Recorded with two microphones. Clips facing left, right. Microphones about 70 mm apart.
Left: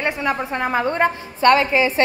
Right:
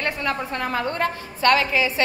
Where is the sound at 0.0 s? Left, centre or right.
Centre.